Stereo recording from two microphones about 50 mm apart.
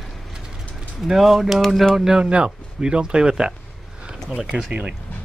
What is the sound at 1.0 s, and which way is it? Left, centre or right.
Speech, centre.